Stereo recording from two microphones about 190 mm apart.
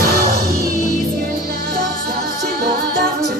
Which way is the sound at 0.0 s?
50° right (ahead or behind).